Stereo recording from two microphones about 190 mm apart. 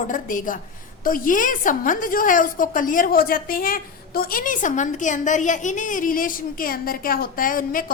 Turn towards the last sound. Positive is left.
turn(degrees=45)  # may be behind; listen again after turning